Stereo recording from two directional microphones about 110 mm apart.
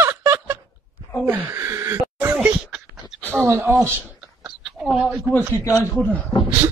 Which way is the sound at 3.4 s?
25° right (ahead or behind).